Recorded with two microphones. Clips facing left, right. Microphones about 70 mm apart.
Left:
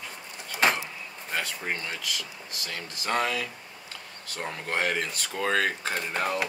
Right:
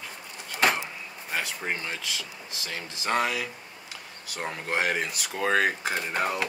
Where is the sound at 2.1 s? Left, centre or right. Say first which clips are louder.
Even; right.